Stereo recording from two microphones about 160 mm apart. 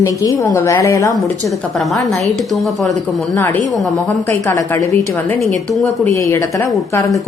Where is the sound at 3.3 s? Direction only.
15° left (ahead or behind).